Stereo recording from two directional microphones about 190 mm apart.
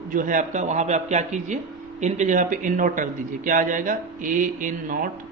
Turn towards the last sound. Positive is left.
turn(degrees=-45)  # may be behind; listen again after turning